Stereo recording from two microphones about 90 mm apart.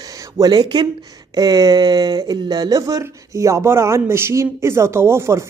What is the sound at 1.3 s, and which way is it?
Speech, 45° right (ahead or behind).